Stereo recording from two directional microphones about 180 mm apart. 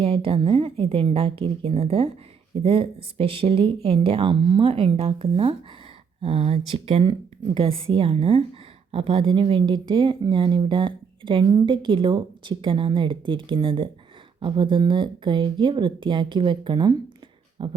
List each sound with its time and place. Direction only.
0.0 s speech: 30° right (ahead or behind)